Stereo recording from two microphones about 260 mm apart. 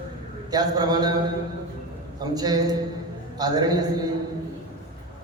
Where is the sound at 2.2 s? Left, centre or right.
Centre.